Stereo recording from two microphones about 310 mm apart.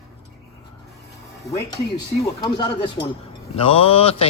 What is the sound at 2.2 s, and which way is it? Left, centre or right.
Speech, centre.